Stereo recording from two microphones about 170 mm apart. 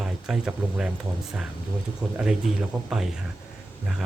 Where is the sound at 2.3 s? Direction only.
5° right (ahead or behind).